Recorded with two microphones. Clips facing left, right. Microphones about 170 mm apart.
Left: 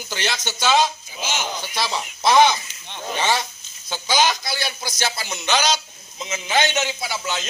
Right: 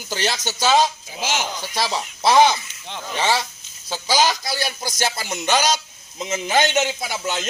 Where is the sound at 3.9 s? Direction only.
35° right (ahead or behind).